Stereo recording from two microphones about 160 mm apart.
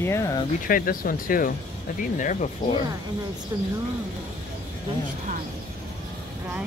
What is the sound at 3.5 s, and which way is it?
Speech, 25° right (ahead or behind).